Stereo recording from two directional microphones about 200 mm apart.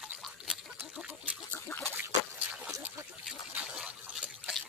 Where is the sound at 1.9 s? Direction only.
10° right (ahead or behind).